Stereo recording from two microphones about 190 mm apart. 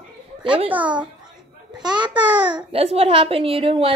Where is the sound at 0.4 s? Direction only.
25° right (ahead or behind).